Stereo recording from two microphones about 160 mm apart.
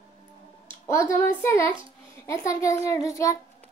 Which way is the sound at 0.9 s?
15° left (ahead or behind).